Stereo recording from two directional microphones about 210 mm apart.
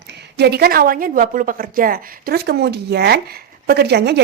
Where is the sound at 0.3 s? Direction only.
50° right (ahead or behind).